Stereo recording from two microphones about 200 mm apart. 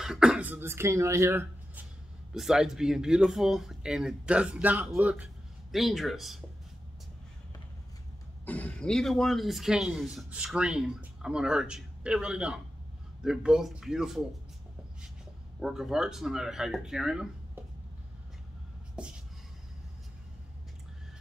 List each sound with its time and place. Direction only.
0.0 s speech: 5° right (ahead or behind)
8.5 s speech: 5° left (ahead or behind)
15.6 s speech: centre (ahead or behind)
19.0 s speech: 5° right (ahead or behind)